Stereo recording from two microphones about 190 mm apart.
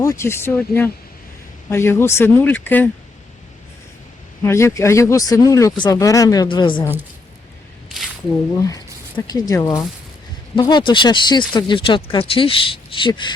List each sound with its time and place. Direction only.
0.0 s speech: 15° left (ahead or behind)
4.4 s speech: 15° left (ahead or behind)
8.5 s speech: 20° left (ahead or behind)